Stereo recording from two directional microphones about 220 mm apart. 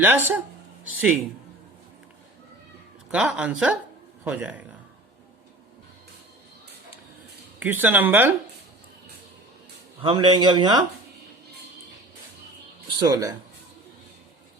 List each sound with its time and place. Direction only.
0.0 s speech: 10° right (ahead or behind)
3.1 s a woman's voice: 5° right (ahead or behind)
7.6 s speech: 10° right (ahead or behind)
10.0 s speech: 25° right (ahead or behind)
13.0 s speech: 15° right (ahead or behind)